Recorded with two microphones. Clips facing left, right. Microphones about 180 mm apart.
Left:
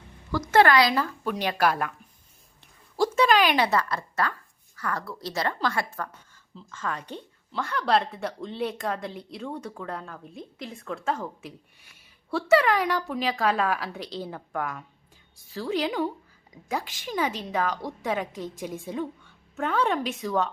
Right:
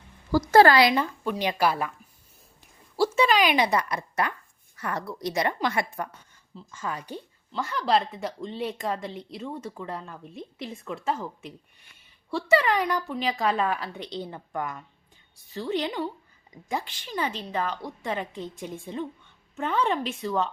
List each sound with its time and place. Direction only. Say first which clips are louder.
0.3 s a woman's voice: right 3 dB; 35° right (ahead or behind)
1.3 s speech: even; 10° right (ahead or behind)
2.9 s a woman's voice: left 1 dB; 10° right (ahead or behind)